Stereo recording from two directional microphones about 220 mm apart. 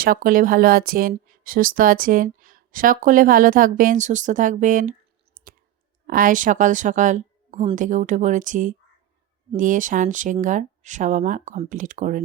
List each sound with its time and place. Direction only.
0.0 s a woman's voice: 40° right (ahead or behind)